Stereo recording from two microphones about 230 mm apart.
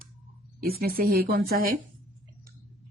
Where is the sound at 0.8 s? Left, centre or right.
Right.